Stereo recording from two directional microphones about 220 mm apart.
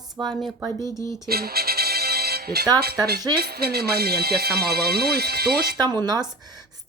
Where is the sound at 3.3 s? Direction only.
45° right (ahead or behind).